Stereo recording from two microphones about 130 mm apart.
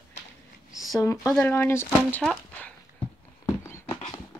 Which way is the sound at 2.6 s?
10° left (ahead or behind).